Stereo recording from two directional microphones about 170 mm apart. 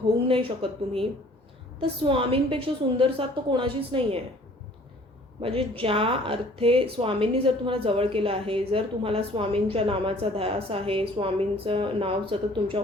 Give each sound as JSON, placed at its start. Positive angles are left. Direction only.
{"t": 0.2, "sound": "a woman's voice", "side_deg": -30}
{"t": 5.4, "sound": "a woman's voice", "side_deg": -35}